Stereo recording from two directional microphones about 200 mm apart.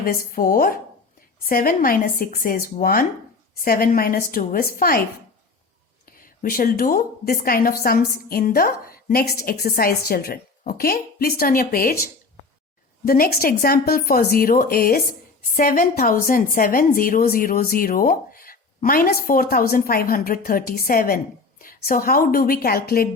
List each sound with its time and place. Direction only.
0.0 s a woman's voice: 45° left (ahead or behind)
6.1 s a woman's voice: 45° left (ahead or behind)